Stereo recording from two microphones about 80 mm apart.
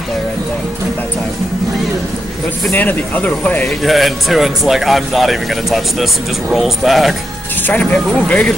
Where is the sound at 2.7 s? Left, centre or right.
Left.